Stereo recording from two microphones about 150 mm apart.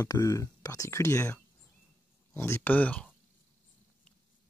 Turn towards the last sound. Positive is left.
turn(degrees=10)  # may be behind; listen again after turning